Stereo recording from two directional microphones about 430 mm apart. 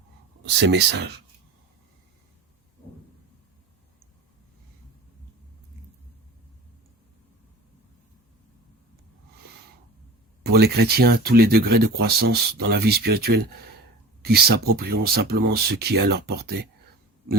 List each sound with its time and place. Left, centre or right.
0.7 s speech: right
10.4 s speech: right